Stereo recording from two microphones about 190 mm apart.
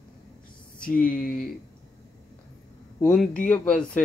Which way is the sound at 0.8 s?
45° left (ahead or behind).